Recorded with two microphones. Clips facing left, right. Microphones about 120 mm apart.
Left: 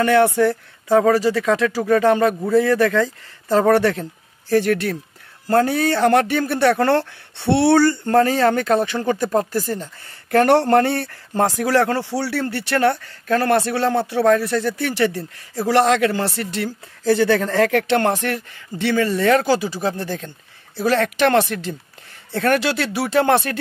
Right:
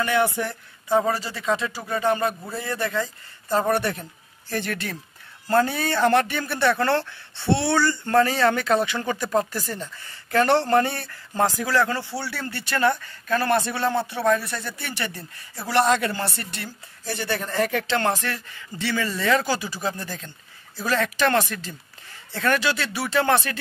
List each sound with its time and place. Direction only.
0.0 s speech: 75° left (ahead or behind); by 4.0 s 90° left
4.5 s a man's voice: 65° left (ahead or behind)
8.1 s speech: 45° left (ahead or behind)
10.0 s speech: 60° left (ahead or behind)
12.1 s a man's voice: 85° left; by 23.6 s 55° left (ahead or behind)